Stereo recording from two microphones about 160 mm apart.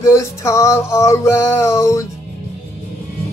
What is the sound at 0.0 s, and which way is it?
Music, 20° left (ahead or behind).